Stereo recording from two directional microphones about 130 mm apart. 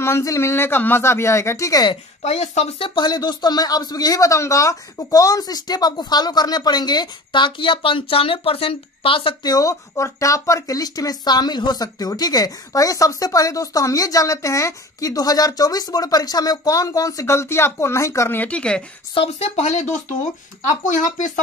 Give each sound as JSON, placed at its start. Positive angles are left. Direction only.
{"t": 0.0, "sound": "speech", "side_deg": 20}
{"t": 2.2, "sound": "speech", "side_deg": 60}
{"t": 2.9, "sound": "speech", "side_deg": 35}
{"t": 19.1, "sound": "speech", "side_deg": 50}